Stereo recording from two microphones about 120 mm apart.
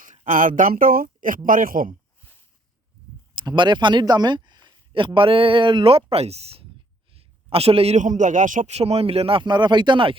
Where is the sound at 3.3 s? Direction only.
40° right (ahead or behind).